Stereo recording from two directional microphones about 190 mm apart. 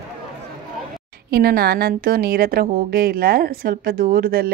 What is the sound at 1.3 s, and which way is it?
A woman's voice, 55° right (ahead or behind).